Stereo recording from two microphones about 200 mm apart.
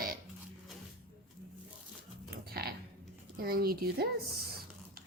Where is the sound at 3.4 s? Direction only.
50° right (ahead or behind).